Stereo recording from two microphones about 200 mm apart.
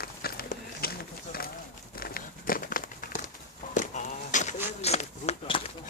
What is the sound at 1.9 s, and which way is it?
Crumpling, 50° left (ahead or behind).